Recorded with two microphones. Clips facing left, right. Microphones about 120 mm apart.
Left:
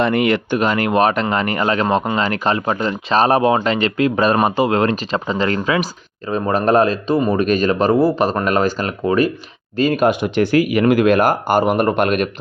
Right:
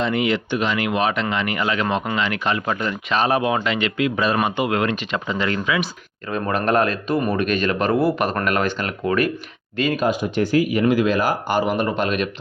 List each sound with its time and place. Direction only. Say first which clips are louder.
0.0 s speech: left 5 dB; 55° left (ahead or behind); by 10.0 s 40° left (ahead or behind)
10.0 s speech: left 4 dB; 70° left (ahead or behind)